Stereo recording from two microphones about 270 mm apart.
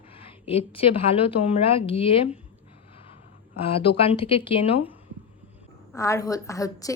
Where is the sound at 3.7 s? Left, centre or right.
Left.